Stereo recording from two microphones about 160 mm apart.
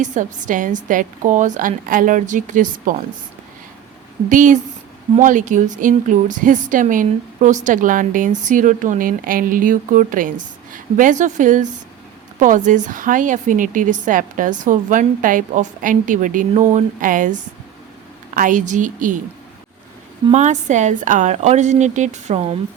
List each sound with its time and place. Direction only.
0.0 s a woman's voice: 50° right (ahead or behind)
4.3 s a woman's voice: 55° right (ahead or behind)
18.3 s a woman's voice: 55° right (ahead or behind)
20.3 s a woman's voice: 50° right (ahead or behind)